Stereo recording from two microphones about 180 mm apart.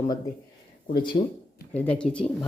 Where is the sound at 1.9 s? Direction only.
5° left (ahead or behind).